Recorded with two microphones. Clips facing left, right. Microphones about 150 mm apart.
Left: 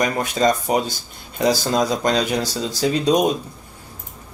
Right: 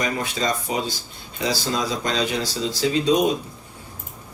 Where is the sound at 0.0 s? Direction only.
45° left (ahead or behind).